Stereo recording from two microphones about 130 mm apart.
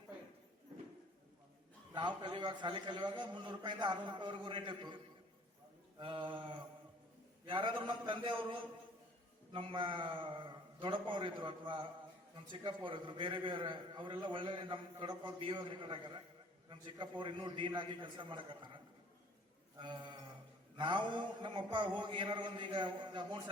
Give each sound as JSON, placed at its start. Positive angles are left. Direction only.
{"t": 2.0, "sound": "a man's voice", "side_deg": -35}
{"t": 6.0, "sound": "a man's voice", "side_deg": -40}
{"t": 19.8, "sound": "a man's voice", "side_deg": -35}